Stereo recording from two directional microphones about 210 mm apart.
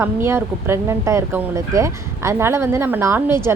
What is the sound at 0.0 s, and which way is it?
A woman's voice, 10° right (ahead or behind).